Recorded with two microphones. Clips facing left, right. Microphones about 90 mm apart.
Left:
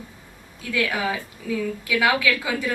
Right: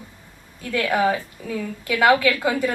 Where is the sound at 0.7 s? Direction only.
45° right (ahead or behind).